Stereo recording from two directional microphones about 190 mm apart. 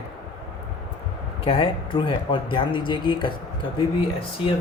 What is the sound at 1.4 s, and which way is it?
Speech, 30° left (ahead or behind).